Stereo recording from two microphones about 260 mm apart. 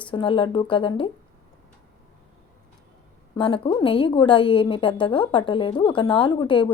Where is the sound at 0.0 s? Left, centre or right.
Centre.